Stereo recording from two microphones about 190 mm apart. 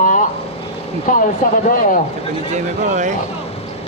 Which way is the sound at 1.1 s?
45° left (ahead or behind).